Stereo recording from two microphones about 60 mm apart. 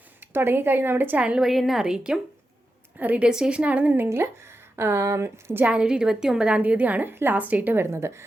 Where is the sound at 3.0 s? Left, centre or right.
Right.